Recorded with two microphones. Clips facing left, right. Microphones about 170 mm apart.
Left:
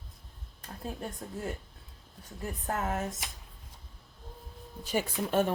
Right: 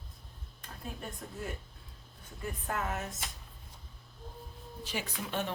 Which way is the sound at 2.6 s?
40° left (ahead or behind).